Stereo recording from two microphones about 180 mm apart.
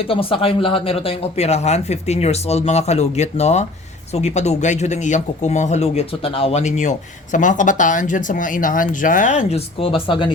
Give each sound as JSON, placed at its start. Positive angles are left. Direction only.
{"t": 0.1, "sound": "speech", "side_deg": 30}